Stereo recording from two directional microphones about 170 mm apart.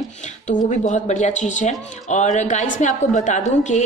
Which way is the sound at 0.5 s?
45° left (ahead or behind).